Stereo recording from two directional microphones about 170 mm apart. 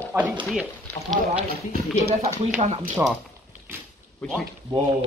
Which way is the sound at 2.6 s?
35° right (ahead or behind).